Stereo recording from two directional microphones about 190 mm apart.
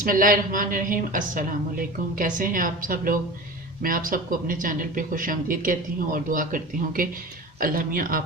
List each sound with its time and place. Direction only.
0.0 s speech: 45° right (ahead or behind)